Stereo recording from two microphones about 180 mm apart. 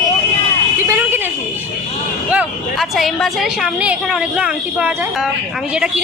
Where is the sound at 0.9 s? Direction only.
10° right (ahead or behind).